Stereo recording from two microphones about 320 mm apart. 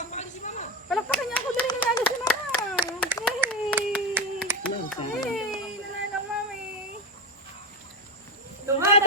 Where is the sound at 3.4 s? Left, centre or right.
Centre.